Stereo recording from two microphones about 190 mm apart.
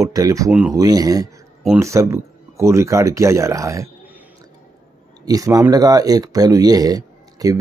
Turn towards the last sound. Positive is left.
turn(degrees=-20)  # may be behind; listen again after turning